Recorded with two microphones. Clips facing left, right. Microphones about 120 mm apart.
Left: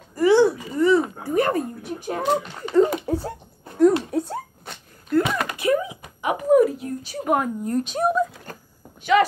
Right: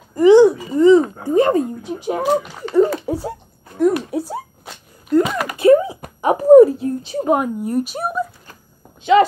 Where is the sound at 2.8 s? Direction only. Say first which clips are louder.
Right 3 dB; 20° left (ahead or behind).